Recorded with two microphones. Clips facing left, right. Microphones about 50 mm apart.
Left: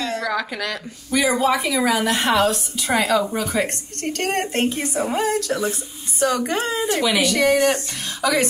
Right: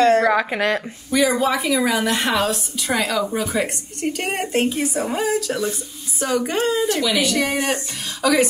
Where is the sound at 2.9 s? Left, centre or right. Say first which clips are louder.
Left 3 dB; centre.